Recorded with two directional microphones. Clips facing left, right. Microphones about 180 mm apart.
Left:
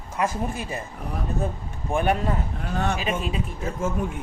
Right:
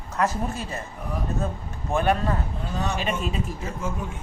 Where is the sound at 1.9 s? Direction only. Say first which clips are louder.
Even; 15° left (ahead or behind).